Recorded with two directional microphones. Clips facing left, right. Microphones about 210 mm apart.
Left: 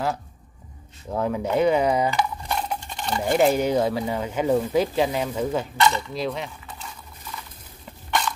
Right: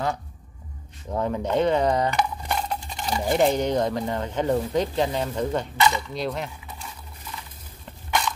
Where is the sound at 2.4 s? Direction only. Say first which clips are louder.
Even; 5° right (ahead or behind).